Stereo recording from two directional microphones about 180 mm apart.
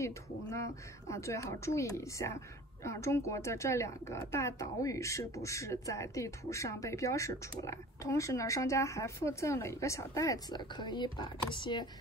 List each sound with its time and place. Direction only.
0.0 s a woman's voice: 15° left (ahead or behind)